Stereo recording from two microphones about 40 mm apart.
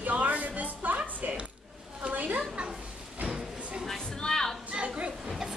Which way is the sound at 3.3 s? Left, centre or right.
Centre.